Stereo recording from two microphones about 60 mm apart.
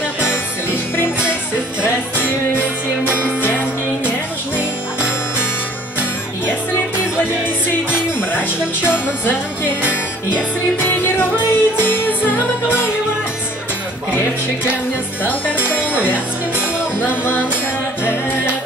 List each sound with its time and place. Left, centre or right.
2.2 s music: left
7.9 s music: left
10.9 s music: left
15.2 s music: left
16.0 s music: right
17.0 s music: left